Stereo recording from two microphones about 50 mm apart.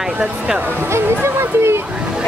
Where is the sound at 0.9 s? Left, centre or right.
Right.